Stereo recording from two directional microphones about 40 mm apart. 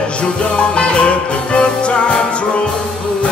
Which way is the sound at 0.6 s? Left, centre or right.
Left.